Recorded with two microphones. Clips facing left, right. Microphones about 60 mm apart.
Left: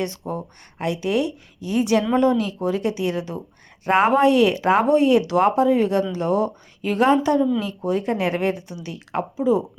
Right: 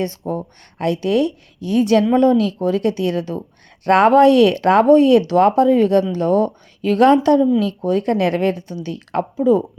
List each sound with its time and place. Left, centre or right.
0.0 s speech: right
3.8 s speech: right